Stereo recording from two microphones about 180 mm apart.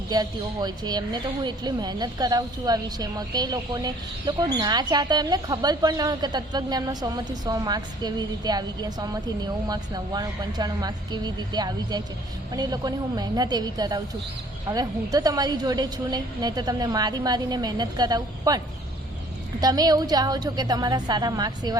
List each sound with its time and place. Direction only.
0.1 s a woman's voice: 20° right (ahead or behind)